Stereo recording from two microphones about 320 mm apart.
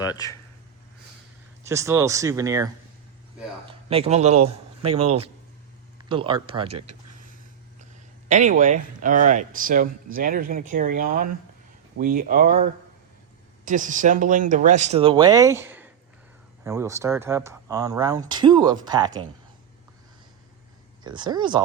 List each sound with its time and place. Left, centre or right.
0.0 s speech: centre
1.6 s speech: centre
3.7 s speech: centre
4.9 s speech: right
6.0 s speech: centre
6.7 s a sound: right
8.3 s speech: right
13.7 s speech: right
21.0 s speech: centre